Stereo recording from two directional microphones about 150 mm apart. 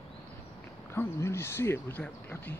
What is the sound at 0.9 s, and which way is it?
Speech, 15° left (ahead or behind).